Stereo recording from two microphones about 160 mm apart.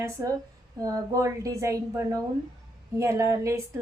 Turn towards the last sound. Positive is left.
turn(degrees=-20)  # may be behind; listen again after turning